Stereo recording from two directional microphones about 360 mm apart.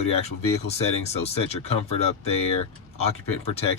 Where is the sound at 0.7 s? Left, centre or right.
Centre.